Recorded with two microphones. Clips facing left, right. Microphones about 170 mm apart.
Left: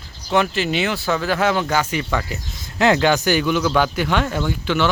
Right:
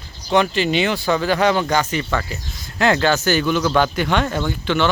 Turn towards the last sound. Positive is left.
turn(degrees=10)  # may be behind; listen again after turning